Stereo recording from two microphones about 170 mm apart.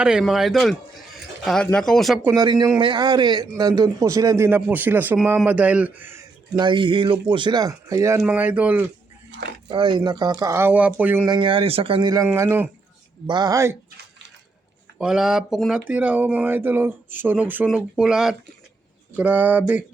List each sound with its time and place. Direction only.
0.0 s speech: 5° right (ahead or behind)
2.2 s a man's voice: 25° right (ahead or behind)
6.6 s a man's voice: 30° right (ahead or behind); by 8.9 s 10° right (ahead or behind)
9.6 s a man's voice: 30° right (ahead or behind); by 11.3 s 10° right (ahead or behind)
11.3 s a man's voice: 30° right (ahead or behind); by 12.6 s 10° right (ahead or behind)
13.2 s a man's voice: 25° right (ahead or behind)
14.9 s speech: 5° right (ahead or behind)